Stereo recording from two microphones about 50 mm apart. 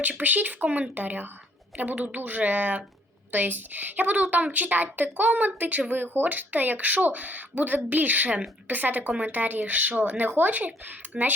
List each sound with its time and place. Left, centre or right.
0.2 s speech: right
11.1 s speech: right